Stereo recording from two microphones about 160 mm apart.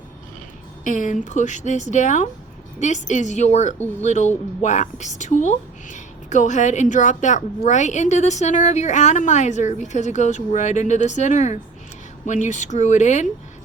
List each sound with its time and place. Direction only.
0.9 s a woman's voice: 50° left (ahead or behind)